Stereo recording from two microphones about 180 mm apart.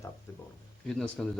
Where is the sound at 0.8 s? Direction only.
5° left (ahead or behind).